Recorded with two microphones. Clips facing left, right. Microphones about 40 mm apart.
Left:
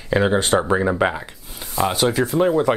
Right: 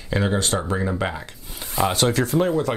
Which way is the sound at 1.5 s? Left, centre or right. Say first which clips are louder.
Left 1 dB; centre.